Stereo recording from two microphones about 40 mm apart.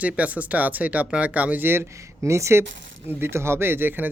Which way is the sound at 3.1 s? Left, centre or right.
Right.